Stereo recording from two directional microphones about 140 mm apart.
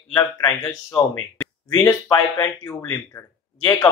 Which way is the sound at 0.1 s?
25° left (ahead or behind).